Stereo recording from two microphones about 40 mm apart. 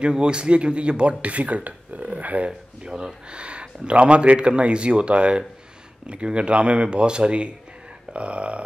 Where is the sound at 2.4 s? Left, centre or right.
Right.